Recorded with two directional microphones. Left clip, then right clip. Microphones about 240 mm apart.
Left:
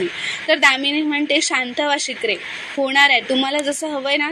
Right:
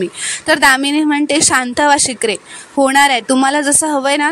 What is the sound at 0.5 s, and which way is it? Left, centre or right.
A woman's voice, right.